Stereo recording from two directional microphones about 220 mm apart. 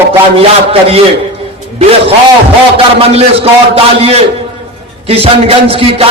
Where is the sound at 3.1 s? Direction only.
25° right (ahead or behind).